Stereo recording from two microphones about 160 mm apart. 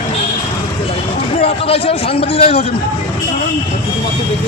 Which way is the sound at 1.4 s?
35° left (ahead or behind).